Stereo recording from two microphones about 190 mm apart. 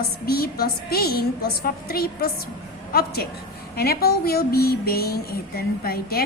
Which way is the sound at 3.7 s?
55° left (ahead or behind).